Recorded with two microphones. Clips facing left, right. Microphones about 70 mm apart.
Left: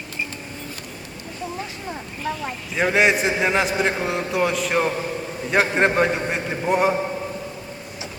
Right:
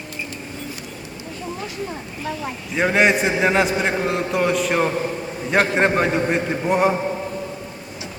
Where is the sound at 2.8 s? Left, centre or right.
Centre.